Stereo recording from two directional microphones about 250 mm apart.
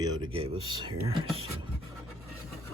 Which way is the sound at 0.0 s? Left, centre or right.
Centre.